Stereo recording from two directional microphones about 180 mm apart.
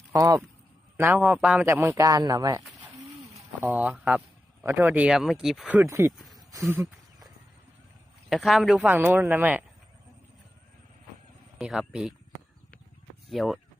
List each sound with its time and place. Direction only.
0.1 s a man's voice: 20° right (ahead or behind)
6.1 s a sound: centre (ahead or behind)
6.5 s speech: 15° right (ahead or behind)
8.3 s a man's voice: centre (ahead or behind)
11.5 s speech: 5° right (ahead or behind)
13.2 s speech: centre (ahead or behind)